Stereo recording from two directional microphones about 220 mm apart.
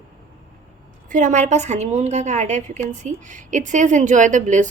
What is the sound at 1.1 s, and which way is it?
A woman's voice, 35° right (ahead or behind).